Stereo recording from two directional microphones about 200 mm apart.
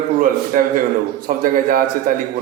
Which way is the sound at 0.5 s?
45° right (ahead or behind).